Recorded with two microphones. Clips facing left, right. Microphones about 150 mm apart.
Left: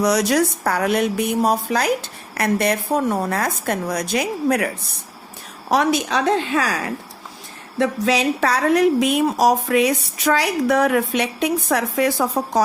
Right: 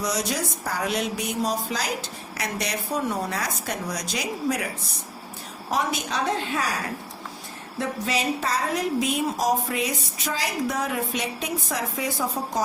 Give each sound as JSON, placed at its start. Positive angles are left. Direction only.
{"t": 0.0, "sound": "a woman's voice", "side_deg": 70}
{"t": 5.7, "sound": "a woman's voice", "side_deg": 85}
{"t": 7.8, "sound": "a woman's voice", "side_deg": 90}